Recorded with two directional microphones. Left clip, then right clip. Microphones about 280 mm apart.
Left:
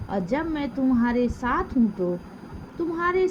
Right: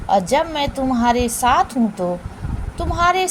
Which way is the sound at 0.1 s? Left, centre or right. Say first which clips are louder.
Right 10 dB; left.